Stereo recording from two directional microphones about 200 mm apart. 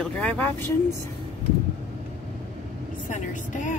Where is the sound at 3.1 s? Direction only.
40° left (ahead or behind).